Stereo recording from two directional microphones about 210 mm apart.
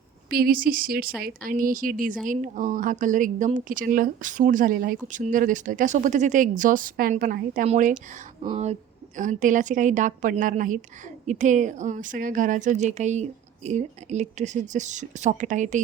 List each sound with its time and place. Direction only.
0.3 s speech: 45° right (ahead or behind)